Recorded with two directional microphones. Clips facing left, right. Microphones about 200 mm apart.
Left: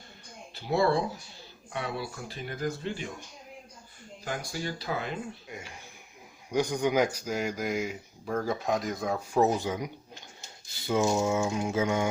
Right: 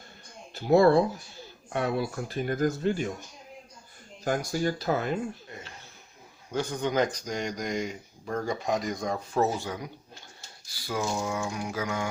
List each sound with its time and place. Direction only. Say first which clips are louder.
0.5 s speech: right 6 dB; 45° right (ahead or behind)
4.2 s speech: right 7 dB; 45° right (ahead or behind)
5.5 s speech: left 1 dB; 10° left (ahead or behind)